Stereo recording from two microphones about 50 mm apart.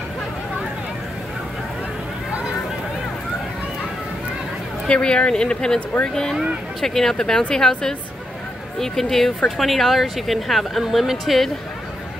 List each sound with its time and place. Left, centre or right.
4.8 s speech: centre
6.8 s speech: centre